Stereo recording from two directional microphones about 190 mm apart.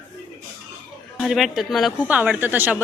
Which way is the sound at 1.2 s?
Centre (ahead or behind).